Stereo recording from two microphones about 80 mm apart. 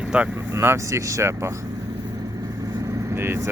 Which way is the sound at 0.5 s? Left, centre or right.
Right.